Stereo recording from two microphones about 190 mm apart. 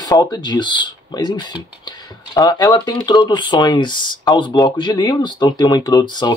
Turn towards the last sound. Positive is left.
turn(degrees=25)  # may be behind; listen again after turning